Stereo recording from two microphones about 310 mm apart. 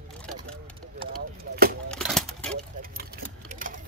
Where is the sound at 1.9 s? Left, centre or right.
Centre.